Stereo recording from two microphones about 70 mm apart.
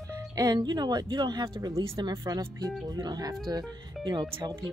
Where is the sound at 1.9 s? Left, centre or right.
Right.